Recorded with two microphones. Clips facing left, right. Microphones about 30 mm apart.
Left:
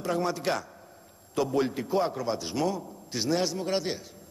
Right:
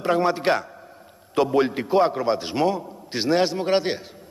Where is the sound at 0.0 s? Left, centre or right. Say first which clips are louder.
Right 8 dB; right.